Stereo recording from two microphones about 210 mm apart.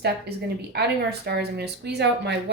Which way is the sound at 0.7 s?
50° right (ahead or behind).